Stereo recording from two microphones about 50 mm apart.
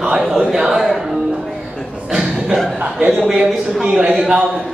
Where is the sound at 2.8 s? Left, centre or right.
Right.